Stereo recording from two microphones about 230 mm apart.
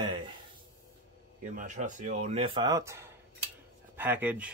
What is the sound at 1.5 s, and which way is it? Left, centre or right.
Speech, right.